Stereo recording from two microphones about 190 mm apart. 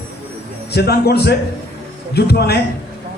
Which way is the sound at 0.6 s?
60° left (ahead or behind).